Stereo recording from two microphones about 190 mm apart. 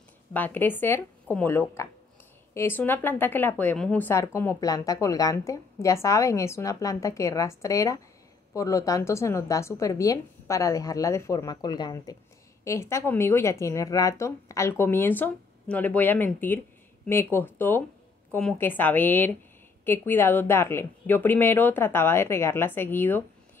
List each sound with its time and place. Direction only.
0.3 s speech: 10° left (ahead or behind)